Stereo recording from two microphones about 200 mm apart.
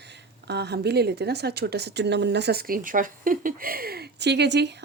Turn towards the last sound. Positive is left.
turn(degrees=-60)  # may be behind; listen again after turning